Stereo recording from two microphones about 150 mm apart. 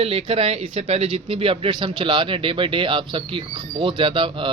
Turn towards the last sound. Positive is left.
turn(degrees=-35)  # may be behind; listen again after turning